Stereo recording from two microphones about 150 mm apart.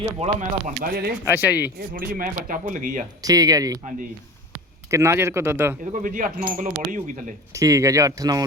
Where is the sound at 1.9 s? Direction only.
75° right (ahead or behind).